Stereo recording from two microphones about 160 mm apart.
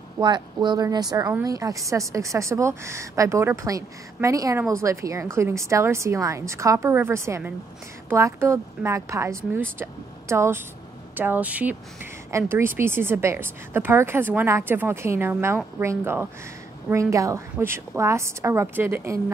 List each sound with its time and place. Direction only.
0.2 s a woman's voice: 25° right (ahead or behind)